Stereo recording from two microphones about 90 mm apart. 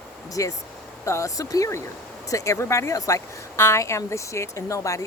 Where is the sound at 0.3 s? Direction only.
40° left (ahead or behind).